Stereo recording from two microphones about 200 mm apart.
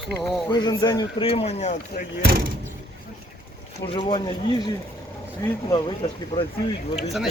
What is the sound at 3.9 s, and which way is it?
Speech, 25° left (ahead or behind).